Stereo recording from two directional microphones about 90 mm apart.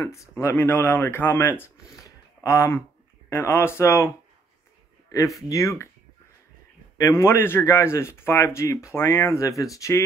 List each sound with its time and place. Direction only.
0.0 s speech: 35° left (ahead or behind)
2.0 s a sound: 35° left (ahead or behind)
3.3 s speech: 30° left (ahead or behind)
5.1 s a man's voice: 40° left (ahead or behind)
7.0 s a man's voice: 35° left (ahead or behind)